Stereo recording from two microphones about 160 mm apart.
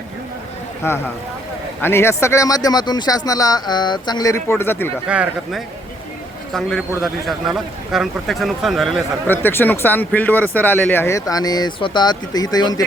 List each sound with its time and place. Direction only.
1.8 s speech: 15° left (ahead or behind)
5.0 s speech: 5° right (ahead or behind)
9.2 s speech: 10° left (ahead or behind)